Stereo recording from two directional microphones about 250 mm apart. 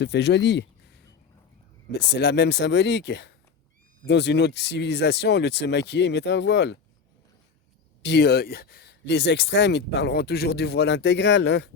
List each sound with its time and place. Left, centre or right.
0.0 s speech: left
1.9 s speech: left
8.0 s speech: left